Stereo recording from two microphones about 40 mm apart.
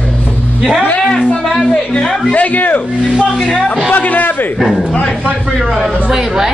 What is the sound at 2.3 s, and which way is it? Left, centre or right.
Speech, left.